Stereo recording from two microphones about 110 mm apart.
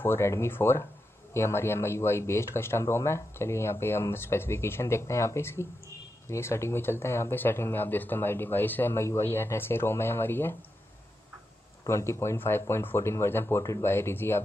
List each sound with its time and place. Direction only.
0.0 s speech: 20° left (ahead or behind)
11.8 s speech: 25° left (ahead or behind)